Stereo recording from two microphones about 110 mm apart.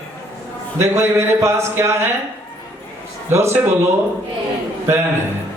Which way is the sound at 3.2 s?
25° right (ahead or behind).